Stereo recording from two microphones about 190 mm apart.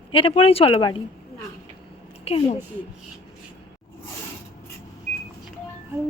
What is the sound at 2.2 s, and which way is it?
Speech, 30° left (ahead or behind).